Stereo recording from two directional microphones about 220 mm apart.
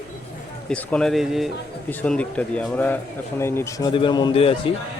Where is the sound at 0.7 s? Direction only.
5° left (ahead or behind); by 4.7 s 25° left (ahead or behind).